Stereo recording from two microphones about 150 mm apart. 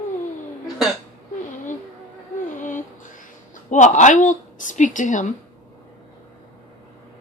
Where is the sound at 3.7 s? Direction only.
55° left (ahead or behind).